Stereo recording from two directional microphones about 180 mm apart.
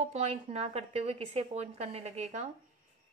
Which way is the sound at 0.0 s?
35° right (ahead or behind).